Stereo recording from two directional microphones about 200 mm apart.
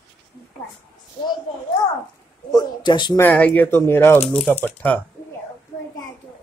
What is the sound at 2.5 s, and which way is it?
Speech, 20° left (ahead or behind).